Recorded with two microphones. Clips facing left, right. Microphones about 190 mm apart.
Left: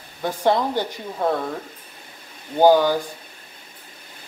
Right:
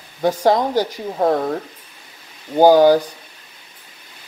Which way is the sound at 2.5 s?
40° right (ahead or behind).